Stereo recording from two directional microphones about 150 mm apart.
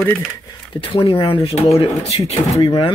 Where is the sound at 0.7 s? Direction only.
40° left (ahead or behind).